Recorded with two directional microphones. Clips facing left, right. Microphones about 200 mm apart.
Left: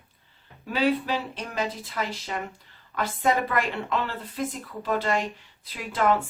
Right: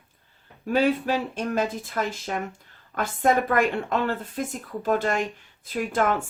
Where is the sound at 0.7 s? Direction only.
45° right (ahead or behind).